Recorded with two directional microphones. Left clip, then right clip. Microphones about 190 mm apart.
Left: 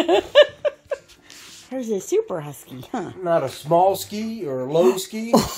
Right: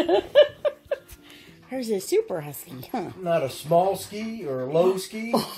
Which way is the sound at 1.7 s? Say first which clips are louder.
Left 2 dB; 10° left (ahead or behind).